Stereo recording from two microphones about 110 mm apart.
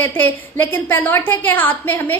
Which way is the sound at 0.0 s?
20° left (ahead or behind).